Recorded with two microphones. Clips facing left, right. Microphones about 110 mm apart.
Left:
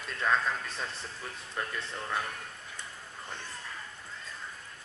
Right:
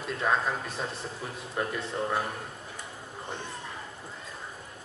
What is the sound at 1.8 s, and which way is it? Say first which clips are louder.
Speech: right 5 dB; 35° right (ahead or behind).